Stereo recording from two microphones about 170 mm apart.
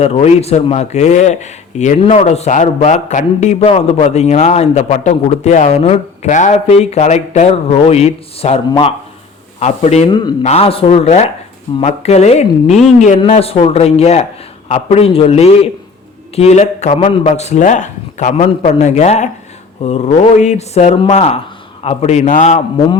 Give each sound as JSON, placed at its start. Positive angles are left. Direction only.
{"t": 0.0, "sound": "speech", "side_deg": 35}
{"t": 10.1, "sound": "speech", "side_deg": 25}
{"t": 10.4, "sound": "a man's voice", "side_deg": 35}